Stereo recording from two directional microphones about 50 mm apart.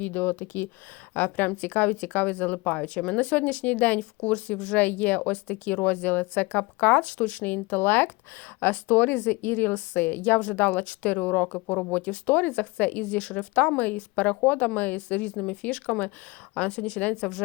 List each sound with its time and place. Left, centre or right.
0.0 s speech: left
4.8 s speech: left; by 17.4 s centre